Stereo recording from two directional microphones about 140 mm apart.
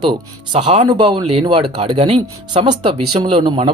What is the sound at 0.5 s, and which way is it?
Speech, 45° right (ahead or behind).